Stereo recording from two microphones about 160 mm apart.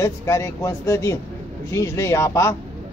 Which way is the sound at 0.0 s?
15° left (ahead or behind).